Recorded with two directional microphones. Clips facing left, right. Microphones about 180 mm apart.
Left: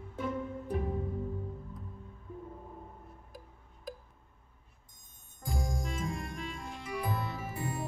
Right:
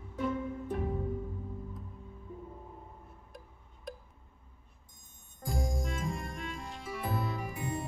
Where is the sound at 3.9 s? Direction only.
Centre (ahead or behind).